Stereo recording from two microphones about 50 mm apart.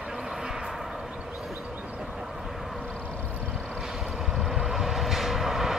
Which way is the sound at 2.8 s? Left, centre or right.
Left.